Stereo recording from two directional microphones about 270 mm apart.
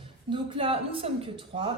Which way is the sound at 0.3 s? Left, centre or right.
Centre.